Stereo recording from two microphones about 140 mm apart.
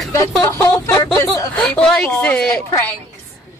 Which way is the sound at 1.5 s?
10° left (ahead or behind).